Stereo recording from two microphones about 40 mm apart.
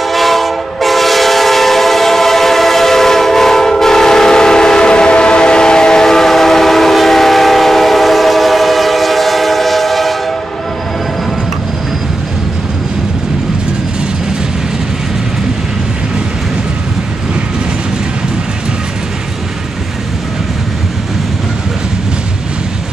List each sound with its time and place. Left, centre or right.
0.0 s train: centre